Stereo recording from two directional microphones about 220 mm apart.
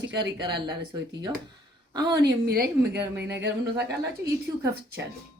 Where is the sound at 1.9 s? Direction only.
20° right (ahead or behind).